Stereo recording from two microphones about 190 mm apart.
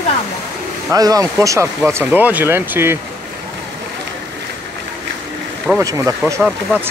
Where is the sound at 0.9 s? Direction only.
20° right (ahead or behind).